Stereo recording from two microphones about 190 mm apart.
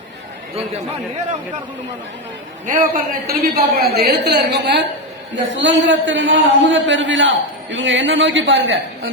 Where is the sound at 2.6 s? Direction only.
45° right (ahead or behind); by 4.8 s 65° right (ahead or behind).